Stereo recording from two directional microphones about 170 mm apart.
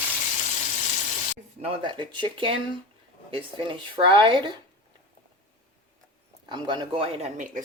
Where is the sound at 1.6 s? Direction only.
30° right (ahead or behind).